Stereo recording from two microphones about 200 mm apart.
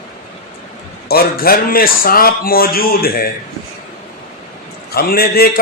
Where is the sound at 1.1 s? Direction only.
50° left (ahead or behind).